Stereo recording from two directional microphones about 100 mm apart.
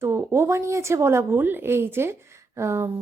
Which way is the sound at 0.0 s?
25° right (ahead or behind).